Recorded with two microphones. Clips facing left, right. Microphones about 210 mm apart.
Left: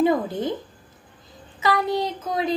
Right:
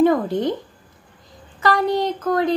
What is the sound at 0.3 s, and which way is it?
Speech, 20° right (ahead or behind).